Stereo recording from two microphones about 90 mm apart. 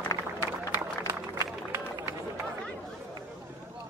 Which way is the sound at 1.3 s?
30° right (ahead or behind).